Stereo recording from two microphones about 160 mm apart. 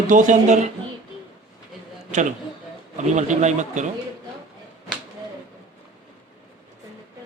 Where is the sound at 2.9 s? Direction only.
50° right (ahead or behind).